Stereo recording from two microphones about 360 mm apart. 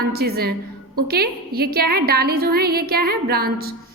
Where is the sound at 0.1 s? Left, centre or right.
Right.